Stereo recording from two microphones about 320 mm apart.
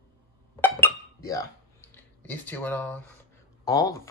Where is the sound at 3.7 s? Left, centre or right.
Centre.